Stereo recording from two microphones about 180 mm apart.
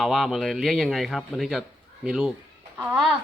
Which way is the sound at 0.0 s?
Centre (ahead or behind).